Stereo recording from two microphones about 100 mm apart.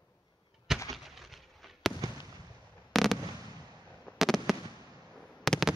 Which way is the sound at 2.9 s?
Centre (ahead or behind).